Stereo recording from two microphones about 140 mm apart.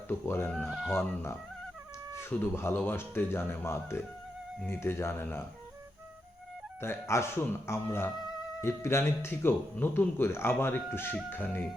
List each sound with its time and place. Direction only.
0.1 s speech: 15° left (ahead or behind)
6.8 s speech: 20° left (ahead or behind)